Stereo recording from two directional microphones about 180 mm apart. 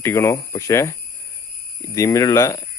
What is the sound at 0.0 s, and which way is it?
Speech, 15° left (ahead or behind).